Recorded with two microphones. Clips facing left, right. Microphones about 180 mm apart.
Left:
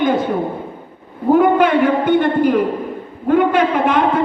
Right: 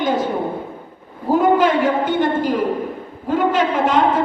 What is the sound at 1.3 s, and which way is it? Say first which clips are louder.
A man's voice: left 3 dB; 60° left (ahead or behind).